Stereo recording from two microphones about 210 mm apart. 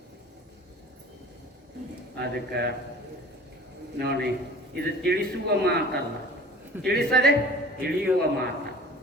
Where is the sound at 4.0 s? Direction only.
50° right (ahead or behind).